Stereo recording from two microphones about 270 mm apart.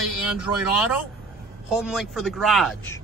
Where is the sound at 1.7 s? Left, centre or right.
Centre.